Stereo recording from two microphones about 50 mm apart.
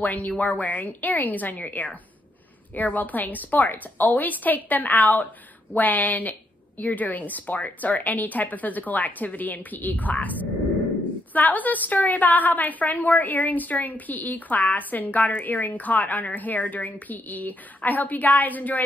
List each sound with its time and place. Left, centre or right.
0.0 s a woman's voice: left
11.3 s a woman's voice: left